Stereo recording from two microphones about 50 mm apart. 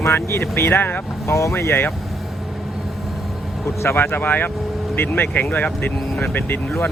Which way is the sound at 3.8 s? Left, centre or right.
Left.